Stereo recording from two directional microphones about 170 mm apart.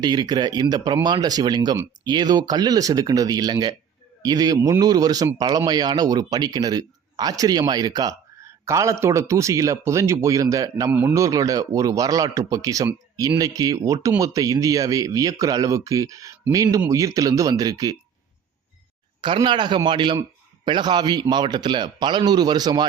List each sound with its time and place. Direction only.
0.0 s speech: 25° right (ahead or behind)
19.2 s speech: 30° right (ahead or behind)